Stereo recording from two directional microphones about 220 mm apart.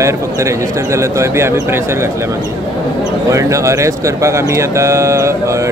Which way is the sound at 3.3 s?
15° right (ahead or behind).